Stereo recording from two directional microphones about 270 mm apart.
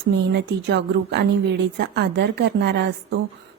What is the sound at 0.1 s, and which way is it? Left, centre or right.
A woman's voice, right.